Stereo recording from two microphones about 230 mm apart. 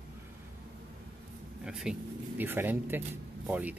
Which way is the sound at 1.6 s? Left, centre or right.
Centre.